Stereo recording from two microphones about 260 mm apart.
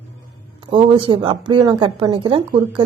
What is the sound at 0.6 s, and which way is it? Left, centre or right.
A woman's voice, centre.